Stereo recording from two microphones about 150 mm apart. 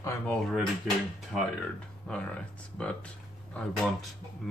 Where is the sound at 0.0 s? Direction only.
10° left (ahead or behind).